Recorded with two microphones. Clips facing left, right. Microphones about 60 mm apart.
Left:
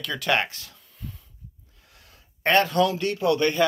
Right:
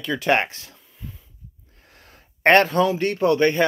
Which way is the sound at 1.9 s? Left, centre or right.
Right.